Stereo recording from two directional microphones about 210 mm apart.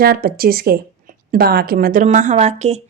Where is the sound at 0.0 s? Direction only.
45° right (ahead or behind).